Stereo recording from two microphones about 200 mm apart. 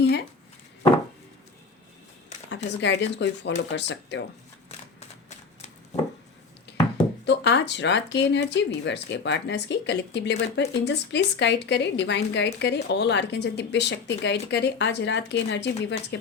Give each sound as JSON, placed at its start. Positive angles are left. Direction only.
{"t": 0.0, "sound": "a sound", "side_deg": 55}
{"t": 2.6, "sound": "speech", "side_deg": 60}
{"t": 4.9, "sound": "shuffling cards", "side_deg": 35}
{"t": 7.3, "sound": "speech", "side_deg": 60}